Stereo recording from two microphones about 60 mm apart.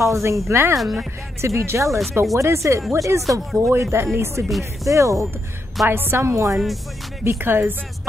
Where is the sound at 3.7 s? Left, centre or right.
Right.